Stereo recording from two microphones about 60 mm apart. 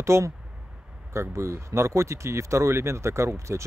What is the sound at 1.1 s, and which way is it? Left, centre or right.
Speech, right.